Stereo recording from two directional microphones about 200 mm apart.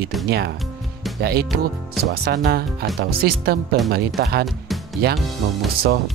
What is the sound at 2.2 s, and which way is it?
Speech, 50° right (ahead or behind).